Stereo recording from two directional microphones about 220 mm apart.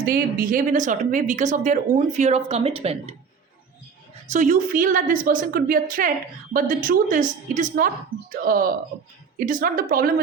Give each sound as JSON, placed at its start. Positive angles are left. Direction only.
{"t": 0.0, "sound": "speech", "side_deg": -40}
{"t": 4.3, "sound": "speech", "side_deg": -35}